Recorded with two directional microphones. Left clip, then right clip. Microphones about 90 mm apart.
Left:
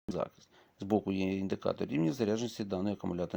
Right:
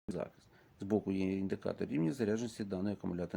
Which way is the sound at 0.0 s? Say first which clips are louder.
Left 5 dB; 15° left (ahead or behind).